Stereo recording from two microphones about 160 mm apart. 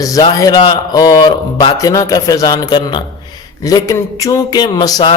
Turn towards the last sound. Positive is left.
turn(degrees=25)  # may be behind; listen again after turning